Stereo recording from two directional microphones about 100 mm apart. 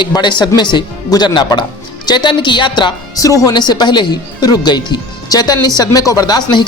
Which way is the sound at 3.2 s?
35° left (ahead or behind).